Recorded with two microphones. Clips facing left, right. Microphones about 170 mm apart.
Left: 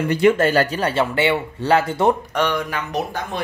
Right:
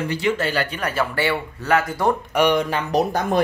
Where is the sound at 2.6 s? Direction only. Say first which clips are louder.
Right 4 dB; 30° right (ahead or behind).